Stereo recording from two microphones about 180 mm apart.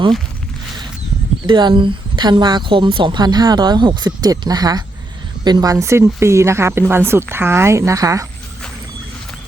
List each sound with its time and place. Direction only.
1.5 s a woman's voice: 25° right (ahead or behind)